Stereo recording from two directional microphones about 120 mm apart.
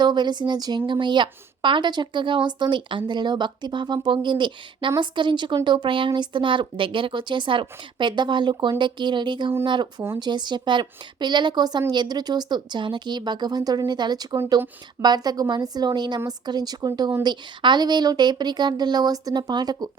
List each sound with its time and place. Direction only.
0.0 s speech: 35° right (ahead or behind)